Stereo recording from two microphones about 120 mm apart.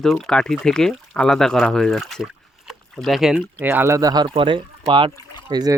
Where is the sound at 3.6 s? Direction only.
20° right (ahead or behind); by 5.1 s 45° right (ahead or behind).